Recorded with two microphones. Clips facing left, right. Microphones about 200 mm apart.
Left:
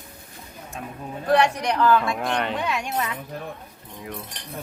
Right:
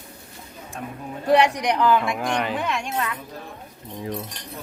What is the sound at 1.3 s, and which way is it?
Speech, 15° right (ahead or behind).